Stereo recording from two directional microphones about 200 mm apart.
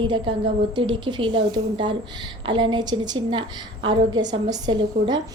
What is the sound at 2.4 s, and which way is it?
A woman's voice, 25° right (ahead or behind).